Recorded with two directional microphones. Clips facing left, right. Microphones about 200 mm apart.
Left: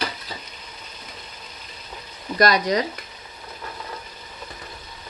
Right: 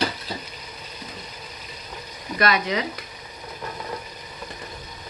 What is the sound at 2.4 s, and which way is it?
Speech, 40° left (ahead or behind).